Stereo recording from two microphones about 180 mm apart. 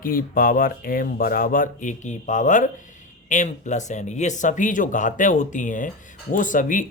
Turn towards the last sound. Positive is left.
turn(degrees=45)  # may be behind; listen again after turning